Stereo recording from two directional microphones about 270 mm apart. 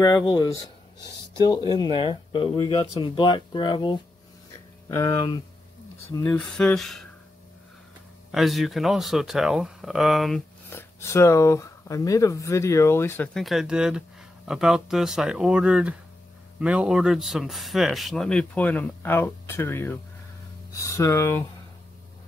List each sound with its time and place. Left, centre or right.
0.0 s speech: centre
2.0 s speech: centre
8.3 s speech: centre